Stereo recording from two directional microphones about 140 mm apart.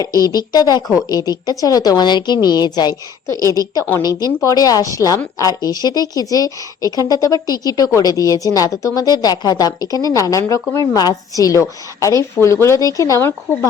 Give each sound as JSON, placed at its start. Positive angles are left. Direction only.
{"t": 0.3, "sound": "a woman's voice", "side_deg": 25}